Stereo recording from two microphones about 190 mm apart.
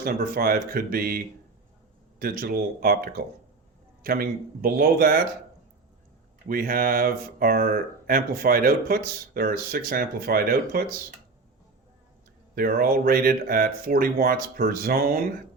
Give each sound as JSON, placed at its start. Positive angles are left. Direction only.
{"t": 0.0, "sound": "speech", "side_deg": -50}
{"t": 6.5, "sound": "speech", "side_deg": -50}
{"t": 12.5, "sound": "speech", "side_deg": -50}